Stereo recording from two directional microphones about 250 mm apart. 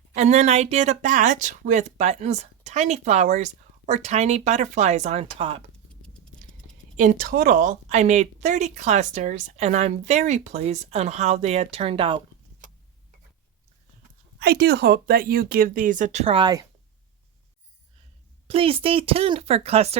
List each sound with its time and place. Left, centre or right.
0.1 s speech: right
6.9 s speech: right
14.3 s speech: right; by 16.6 s centre
18.4 s speech: right